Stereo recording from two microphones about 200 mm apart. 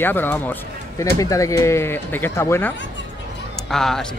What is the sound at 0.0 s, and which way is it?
Speech, 10° left (ahead or behind).